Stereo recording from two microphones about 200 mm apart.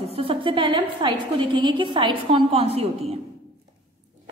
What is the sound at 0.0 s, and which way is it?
A woman's voice, 30° right (ahead or behind).